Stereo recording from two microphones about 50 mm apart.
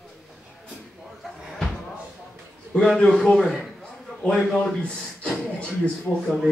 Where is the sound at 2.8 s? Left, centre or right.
Centre.